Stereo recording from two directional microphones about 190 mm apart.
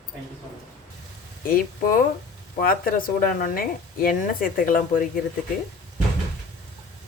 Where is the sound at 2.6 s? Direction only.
50° left (ahead or behind).